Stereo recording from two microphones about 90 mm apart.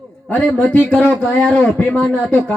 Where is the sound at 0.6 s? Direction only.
15° left (ahead or behind).